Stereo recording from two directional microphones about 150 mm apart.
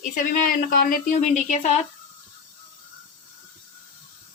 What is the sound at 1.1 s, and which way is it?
Speech, 50° left (ahead or behind).